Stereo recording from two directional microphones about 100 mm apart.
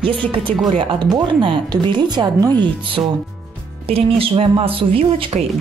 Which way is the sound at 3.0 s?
25° right (ahead or behind).